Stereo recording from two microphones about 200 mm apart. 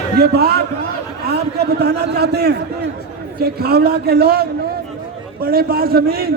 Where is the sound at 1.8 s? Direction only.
55° right (ahead or behind).